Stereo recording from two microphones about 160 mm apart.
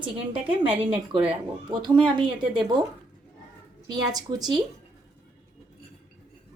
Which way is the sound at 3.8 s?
25° right (ahead or behind).